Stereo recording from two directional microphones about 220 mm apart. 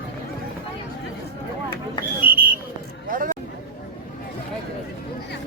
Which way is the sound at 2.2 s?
40° right (ahead or behind).